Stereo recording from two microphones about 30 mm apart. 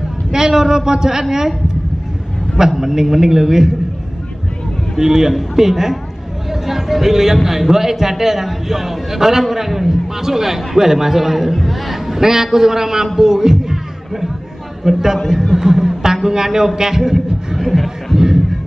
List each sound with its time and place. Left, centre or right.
0.3 s speech: centre
2.8 s a man's voice: centre
4.9 s a man's voice: centre
6.5 s a sound: centre
7.3 s a man's voice: centre
14.9 s speech: centre
15.2 s a sound: centre